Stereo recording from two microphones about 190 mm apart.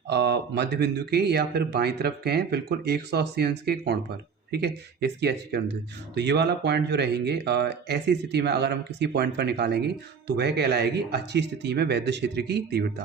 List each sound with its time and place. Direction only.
0.1 s speech: 60° right (ahead or behind)